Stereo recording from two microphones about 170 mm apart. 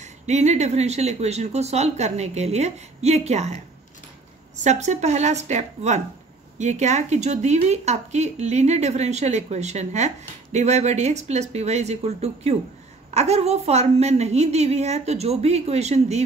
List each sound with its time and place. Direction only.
0.0 s speech: 40° right (ahead or behind)
4.6 s a woman's voice: 45° right (ahead or behind)